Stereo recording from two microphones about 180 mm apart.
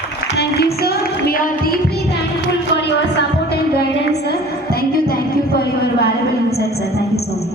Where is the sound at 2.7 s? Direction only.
70° left (ahead or behind).